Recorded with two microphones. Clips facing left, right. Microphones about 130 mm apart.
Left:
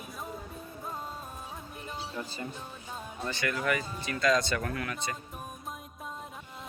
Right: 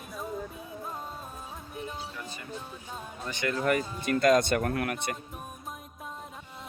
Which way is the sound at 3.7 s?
50° right (ahead or behind).